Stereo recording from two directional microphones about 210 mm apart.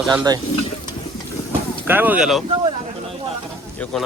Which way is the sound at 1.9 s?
10° right (ahead or behind).